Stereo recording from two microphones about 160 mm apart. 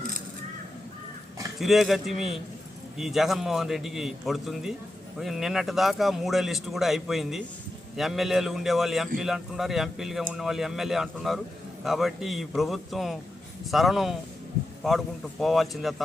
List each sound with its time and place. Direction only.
1.5 s a man's voice: centre (ahead or behind)